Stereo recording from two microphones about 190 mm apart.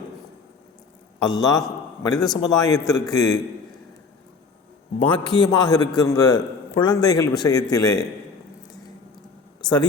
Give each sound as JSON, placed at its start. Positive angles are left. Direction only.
{"t": 1.2, "sound": "a man's voice", "side_deg": 20}
{"t": 2.1, "sound": "a man's voice", "side_deg": 0}
{"t": 2.6, "sound": "a man's voice", "side_deg": 20}
{"t": 4.9, "sound": "a man's voice", "side_deg": 25}
{"t": 9.6, "sound": "speech", "side_deg": 20}